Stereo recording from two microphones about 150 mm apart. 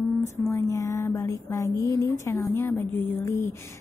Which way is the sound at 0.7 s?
20° left (ahead or behind).